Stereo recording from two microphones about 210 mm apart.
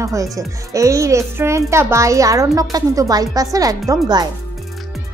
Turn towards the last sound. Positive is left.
turn(degrees=-20)  # may be behind; listen again after turning